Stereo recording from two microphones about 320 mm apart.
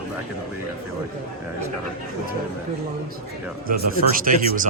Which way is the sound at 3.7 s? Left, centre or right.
Right.